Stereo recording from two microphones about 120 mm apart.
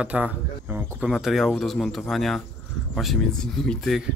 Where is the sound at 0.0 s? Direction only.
10° right (ahead or behind).